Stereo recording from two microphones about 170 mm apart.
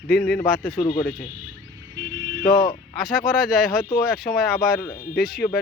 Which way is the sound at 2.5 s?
25° left (ahead or behind).